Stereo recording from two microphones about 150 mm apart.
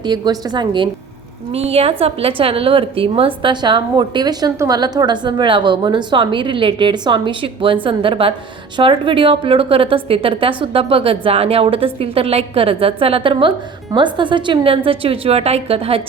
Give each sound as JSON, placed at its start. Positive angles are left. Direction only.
{"t": 0.0, "sound": "a woman's voice", "side_deg": -25}
{"t": 1.5, "sound": "a woman's voice", "side_deg": -45}